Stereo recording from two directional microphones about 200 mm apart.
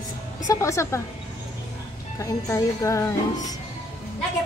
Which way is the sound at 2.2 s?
15° left (ahead or behind).